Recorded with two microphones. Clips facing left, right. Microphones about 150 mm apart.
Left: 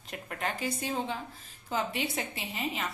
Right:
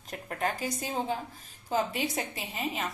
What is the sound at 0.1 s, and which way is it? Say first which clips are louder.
Speech: right 3 dB; 40° right (ahead or behind).